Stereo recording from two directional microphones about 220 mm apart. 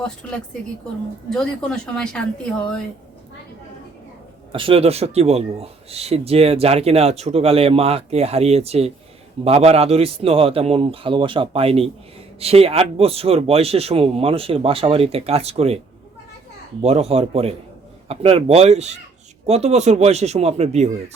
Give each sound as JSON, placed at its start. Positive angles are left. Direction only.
{"t": 0.0, "sound": "speech", "side_deg": 5}
{"t": 4.5, "sound": "speech", "side_deg": -25}
{"t": 16.8, "sound": "speech", "side_deg": -30}